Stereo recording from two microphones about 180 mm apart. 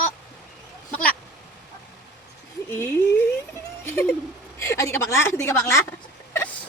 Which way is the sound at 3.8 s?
15° left (ahead or behind).